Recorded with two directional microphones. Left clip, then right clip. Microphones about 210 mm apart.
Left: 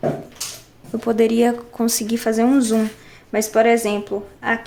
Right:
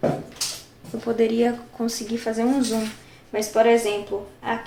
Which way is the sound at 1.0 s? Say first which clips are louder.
Left 4 dB; 35° left (ahead or behind).